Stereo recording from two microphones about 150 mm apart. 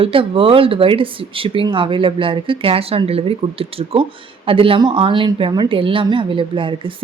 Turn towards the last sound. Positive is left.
turn(degrees=-35)  # may be behind; listen again after turning